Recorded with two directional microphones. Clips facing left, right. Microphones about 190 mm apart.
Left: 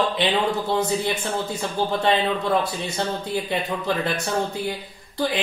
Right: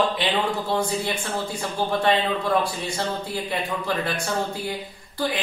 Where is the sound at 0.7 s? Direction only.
20° left (ahead or behind).